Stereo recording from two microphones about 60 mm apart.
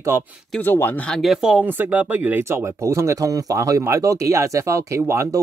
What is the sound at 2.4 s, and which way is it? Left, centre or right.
Speech, right.